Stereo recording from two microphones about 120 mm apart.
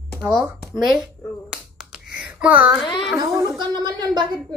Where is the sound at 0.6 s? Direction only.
Centre (ahead or behind).